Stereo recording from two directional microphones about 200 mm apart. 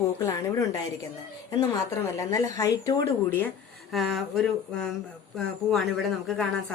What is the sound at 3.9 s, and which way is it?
Speech, centre (ahead or behind).